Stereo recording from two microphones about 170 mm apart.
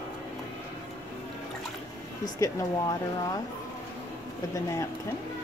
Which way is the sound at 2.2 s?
20° left (ahead or behind).